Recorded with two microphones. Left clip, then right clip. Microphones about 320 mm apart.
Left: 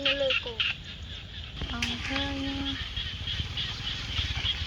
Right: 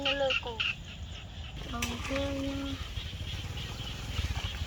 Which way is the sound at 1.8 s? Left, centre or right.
Centre.